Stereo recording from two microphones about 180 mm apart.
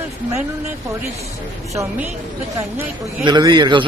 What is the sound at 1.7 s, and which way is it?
Speech, 10° right (ahead or behind).